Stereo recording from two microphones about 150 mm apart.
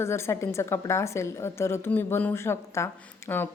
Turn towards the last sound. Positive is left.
turn(degrees=20)  # may be behind; listen again after turning